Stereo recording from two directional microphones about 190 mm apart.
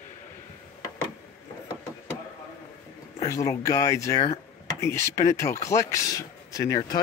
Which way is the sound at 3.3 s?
15° left (ahead or behind).